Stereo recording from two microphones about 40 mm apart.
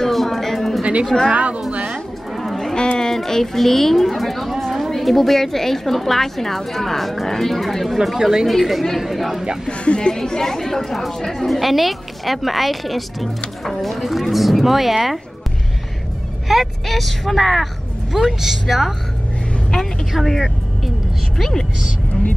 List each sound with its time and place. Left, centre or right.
0.0 s a sound: centre
1.3 s a sound: right
1.9 s music: centre
3.0 s speech: centre
8.5 s speech: centre
9.7 s speech: left; by 15.1 s centre
16.4 s speech: centre
18.1 s speech: centre
20.1 s speech: centre
21.4 s speech: centre